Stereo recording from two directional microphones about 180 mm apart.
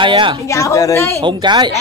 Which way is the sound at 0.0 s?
25° right (ahead or behind).